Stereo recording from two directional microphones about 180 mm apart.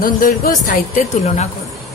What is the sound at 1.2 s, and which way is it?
Speech, 40° left (ahead or behind).